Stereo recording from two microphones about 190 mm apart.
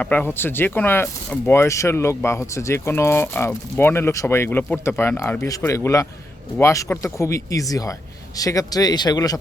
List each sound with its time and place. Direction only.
0.0 s a man's voice: 10° left (ahead or behind)